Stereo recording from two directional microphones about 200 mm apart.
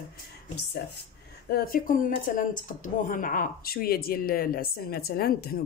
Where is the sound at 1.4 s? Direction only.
45° left (ahead or behind).